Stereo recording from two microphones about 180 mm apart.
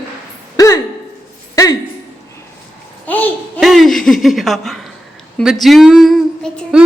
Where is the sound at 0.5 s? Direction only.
15° left (ahead or behind).